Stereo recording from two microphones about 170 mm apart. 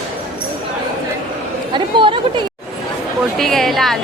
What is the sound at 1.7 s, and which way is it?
Chatter, 30° right (ahead or behind).